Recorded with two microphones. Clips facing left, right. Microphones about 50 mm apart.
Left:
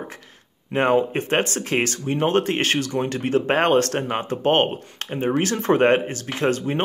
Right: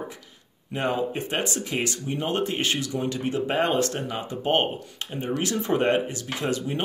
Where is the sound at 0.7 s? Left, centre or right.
Left.